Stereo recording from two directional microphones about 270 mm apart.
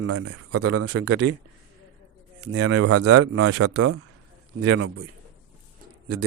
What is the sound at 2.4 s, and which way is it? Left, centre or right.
A man's voice, right.